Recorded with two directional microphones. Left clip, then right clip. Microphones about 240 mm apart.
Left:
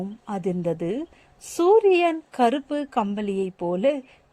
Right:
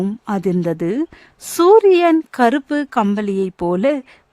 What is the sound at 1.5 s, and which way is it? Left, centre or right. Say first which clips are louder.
Speech: right 7 dB; right.